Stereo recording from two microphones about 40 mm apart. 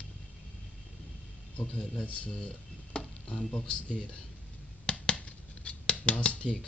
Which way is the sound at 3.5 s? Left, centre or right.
Centre.